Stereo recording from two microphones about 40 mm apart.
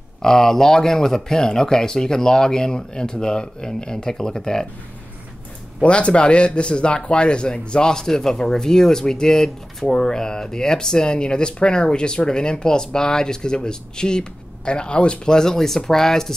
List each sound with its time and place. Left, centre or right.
0.2 s speech: centre
5.8 s a man's voice: left; by 16.3 s centre